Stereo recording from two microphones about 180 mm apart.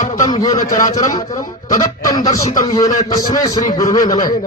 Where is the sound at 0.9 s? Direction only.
20° left (ahead or behind).